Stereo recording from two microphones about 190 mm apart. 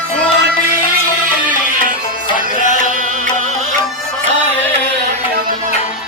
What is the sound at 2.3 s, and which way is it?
Music, 40° left (ahead or behind).